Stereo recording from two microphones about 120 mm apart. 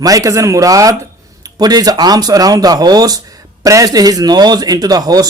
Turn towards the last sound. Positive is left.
turn(degrees=-30)  # may be behind; listen again after turning